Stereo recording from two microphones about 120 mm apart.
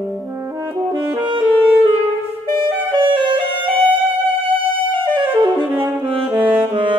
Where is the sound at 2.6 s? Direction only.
45° right (ahead or behind).